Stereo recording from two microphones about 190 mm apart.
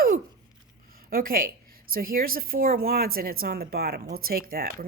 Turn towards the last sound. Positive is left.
turn(degrees=-50)  # may be behind; listen again after turning